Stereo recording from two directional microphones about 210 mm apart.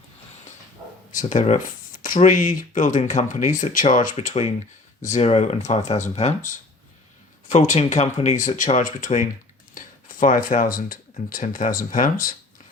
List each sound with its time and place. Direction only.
1.1 s speech: 35° left (ahead or behind)